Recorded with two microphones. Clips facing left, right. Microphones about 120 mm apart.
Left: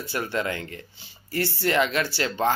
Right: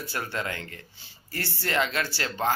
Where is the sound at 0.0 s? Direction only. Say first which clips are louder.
Left 4 dB; 20° left (ahead or behind).